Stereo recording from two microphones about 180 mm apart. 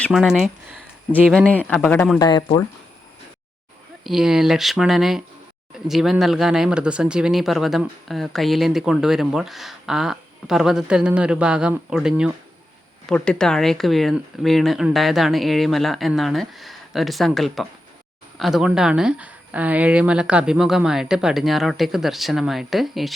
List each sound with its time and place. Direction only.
0.0 s speech: centre (ahead or behind)
2.1 s speech: 20° left (ahead or behind)
4.0 s speech: 5° right (ahead or behind)